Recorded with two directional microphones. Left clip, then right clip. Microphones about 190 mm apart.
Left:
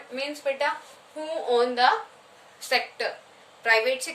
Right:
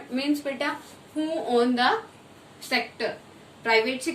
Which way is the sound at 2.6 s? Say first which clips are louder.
Left 1 dB; 40° left (ahead or behind).